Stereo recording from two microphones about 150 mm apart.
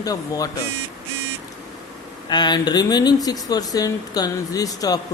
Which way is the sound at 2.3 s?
30° left (ahead or behind).